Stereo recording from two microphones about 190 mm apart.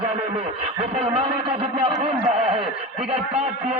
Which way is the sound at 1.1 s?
30° right (ahead or behind).